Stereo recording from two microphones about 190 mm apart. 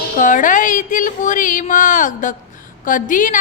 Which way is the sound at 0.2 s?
45° left (ahead or behind).